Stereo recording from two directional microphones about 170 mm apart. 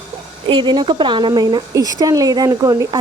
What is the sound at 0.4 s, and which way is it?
Speech, 30° right (ahead or behind).